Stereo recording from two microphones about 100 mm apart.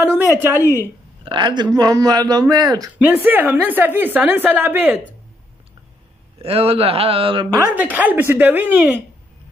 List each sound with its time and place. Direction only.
0.0 s speech: 20° right (ahead or behind)
1.2 s a man's voice: 50° right (ahead or behind)
3.0 s a woman's voice: 20° right (ahead or behind)
6.3 s speech: 75° right (ahead or behind)
7.7 s speech: 15° right (ahead or behind)